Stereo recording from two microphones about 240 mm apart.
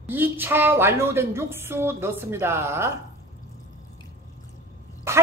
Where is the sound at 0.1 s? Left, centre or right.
Centre.